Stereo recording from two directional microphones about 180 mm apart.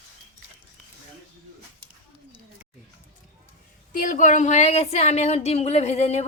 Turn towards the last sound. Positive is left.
turn(degrees=35)  # may be behind; listen again after turning